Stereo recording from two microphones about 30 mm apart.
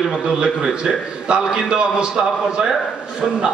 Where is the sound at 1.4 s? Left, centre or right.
Centre.